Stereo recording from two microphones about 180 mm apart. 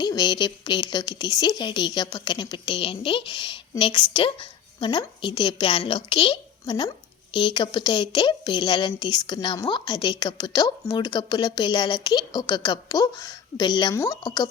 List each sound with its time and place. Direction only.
0.0 s a woman's voice: 25° left (ahead or behind)